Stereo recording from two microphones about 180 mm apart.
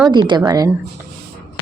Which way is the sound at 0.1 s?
25° right (ahead or behind).